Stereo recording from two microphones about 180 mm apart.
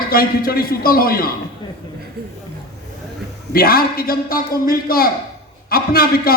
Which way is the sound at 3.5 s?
55° left (ahead or behind).